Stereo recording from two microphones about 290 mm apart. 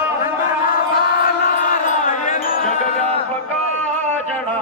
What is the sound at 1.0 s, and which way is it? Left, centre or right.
Chant, left.